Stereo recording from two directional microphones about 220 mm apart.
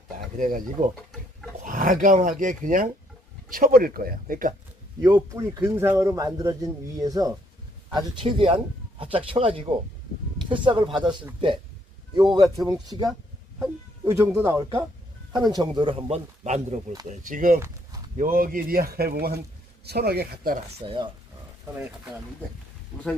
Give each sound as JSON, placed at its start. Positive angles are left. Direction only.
{"t": 0.3, "sound": "speech", "side_deg": -35}
{"t": 5.0, "sound": "speech", "side_deg": -15}
{"t": 20.7, "sound": "speech", "side_deg": -25}